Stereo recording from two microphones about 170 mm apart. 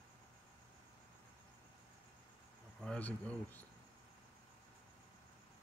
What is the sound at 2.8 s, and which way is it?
Speech, 5° left (ahead or behind).